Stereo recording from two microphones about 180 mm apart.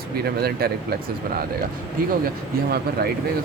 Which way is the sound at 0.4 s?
60° right (ahead or behind).